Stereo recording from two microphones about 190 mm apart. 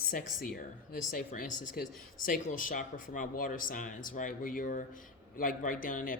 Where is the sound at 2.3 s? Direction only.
45° left (ahead or behind).